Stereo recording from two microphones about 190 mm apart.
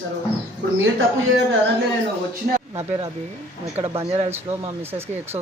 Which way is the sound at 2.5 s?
45° right (ahead or behind).